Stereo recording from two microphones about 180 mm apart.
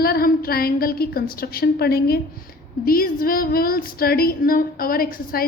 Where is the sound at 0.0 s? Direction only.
55° left (ahead or behind).